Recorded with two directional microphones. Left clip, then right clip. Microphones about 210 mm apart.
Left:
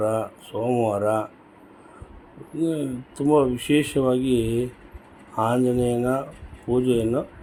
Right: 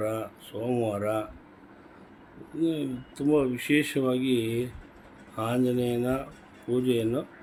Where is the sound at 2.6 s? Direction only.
10° left (ahead or behind).